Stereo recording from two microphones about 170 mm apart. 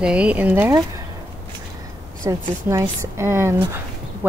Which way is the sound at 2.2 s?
15° right (ahead or behind).